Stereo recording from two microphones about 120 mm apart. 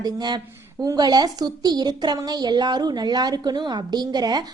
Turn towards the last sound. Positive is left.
turn(degrees=-35)  # may be behind; listen again after turning